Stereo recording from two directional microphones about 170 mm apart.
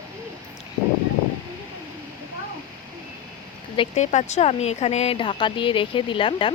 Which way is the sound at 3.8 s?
40° left (ahead or behind).